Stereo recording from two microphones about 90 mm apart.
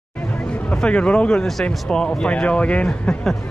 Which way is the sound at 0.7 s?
10° left (ahead or behind).